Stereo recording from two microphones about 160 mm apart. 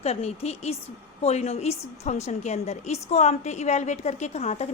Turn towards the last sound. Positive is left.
turn(degrees=40)  # may be behind; listen again after turning